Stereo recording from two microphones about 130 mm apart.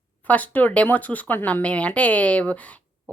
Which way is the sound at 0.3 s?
10° left (ahead or behind).